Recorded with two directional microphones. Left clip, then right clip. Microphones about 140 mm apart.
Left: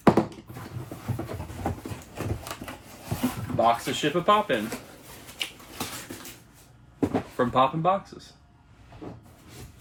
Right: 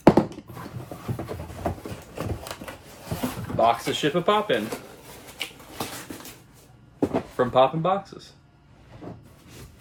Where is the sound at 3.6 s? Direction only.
35° right (ahead or behind).